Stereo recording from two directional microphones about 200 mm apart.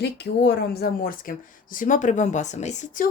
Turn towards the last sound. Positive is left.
turn(degrees=40)  # may be behind; listen again after turning